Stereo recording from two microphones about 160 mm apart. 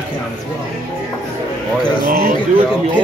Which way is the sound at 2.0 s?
65° right (ahead or behind).